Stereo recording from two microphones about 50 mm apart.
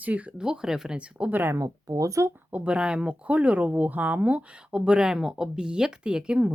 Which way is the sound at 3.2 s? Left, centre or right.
Right.